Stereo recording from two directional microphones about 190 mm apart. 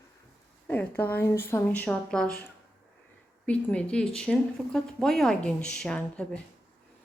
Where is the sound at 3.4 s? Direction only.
5° left (ahead or behind).